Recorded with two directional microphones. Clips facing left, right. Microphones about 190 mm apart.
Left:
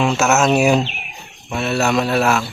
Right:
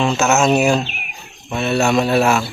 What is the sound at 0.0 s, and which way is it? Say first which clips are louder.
Speech: even; 5° left (ahead or behind).